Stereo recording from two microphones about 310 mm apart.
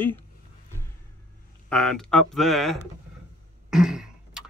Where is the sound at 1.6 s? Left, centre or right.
Centre.